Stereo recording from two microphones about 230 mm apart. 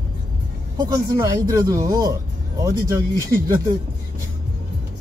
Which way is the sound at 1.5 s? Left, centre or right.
Centre.